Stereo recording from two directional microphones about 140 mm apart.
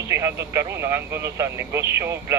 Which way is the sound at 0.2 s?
20° right (ahead or behind).